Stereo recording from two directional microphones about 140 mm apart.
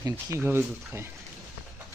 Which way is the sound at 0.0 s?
20° right (ahead or behind).